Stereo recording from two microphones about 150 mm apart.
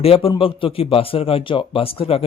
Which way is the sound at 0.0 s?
40° left (ahead or behind).